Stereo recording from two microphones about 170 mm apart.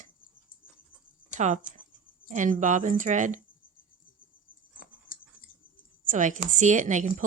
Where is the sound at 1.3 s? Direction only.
45° right (ahead or behind).